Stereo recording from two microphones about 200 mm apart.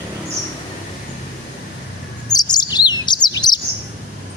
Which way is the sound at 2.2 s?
20° left (ahead or behind).